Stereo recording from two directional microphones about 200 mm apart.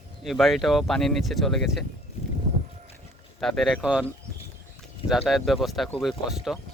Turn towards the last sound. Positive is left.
turn(degrees=0)  # may be behind; listen again after turning